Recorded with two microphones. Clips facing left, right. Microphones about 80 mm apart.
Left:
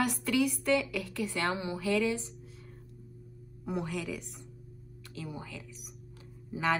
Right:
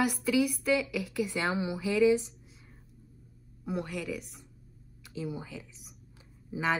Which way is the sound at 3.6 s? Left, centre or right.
Centre.